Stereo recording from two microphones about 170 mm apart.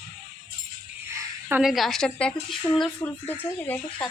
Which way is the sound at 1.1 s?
15° right (ahead or behind).